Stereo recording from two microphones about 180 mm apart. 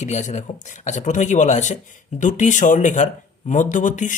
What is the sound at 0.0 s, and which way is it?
Speech, 40° left (ahead or behind).